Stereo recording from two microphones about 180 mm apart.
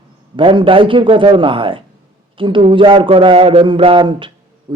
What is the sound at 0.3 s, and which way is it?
A man's voice, 30° right (ahead or behind).